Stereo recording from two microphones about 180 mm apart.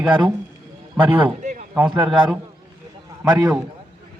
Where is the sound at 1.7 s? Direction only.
5° right (ahead or behind).